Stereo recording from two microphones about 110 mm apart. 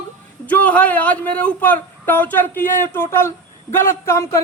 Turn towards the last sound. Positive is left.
turn(degrees=25)  # may be behind; listen again after turning